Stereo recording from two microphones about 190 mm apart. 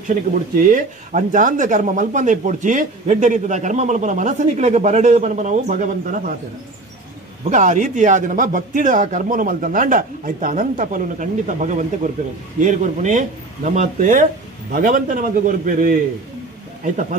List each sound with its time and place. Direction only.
0.7 s speech: 45° right (ahead or behind)
7.4 s a man's voice: 40° right (ahead or behind)